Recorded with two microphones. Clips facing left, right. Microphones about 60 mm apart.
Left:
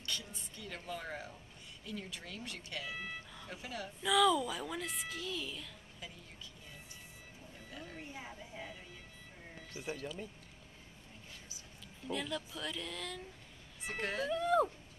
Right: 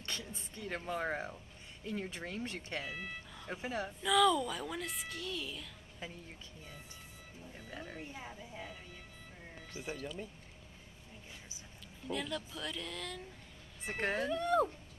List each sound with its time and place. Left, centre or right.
0.0 s a sound: right
1.9 s speech: right
3.0 s vehicle: centre
3.4 s speech: right
4.0 s a woman's voice: centre
7.7 s a sound: right
8.1 s a woman's voice: centre
12.1 s a woman's voice: centre
13.8 s speech: right
14.3 s a woman's voice: centre